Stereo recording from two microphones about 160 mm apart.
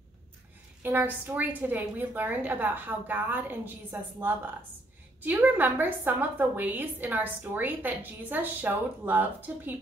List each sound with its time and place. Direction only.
0.8 s a woman's voice: 10° right (ahead or behind)
5.2 s a woman's voice: 10° right (ahead or behind)